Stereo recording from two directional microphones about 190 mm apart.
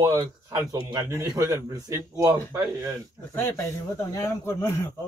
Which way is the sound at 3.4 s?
15° left (ahead or behind).